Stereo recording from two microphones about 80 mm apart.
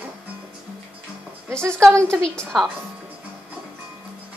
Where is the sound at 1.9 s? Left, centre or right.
Right.